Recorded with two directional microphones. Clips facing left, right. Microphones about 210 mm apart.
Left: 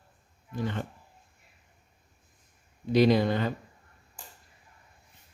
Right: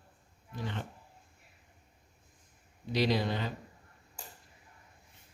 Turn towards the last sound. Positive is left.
turn(degrees=50)  # may be behind; listen again after turning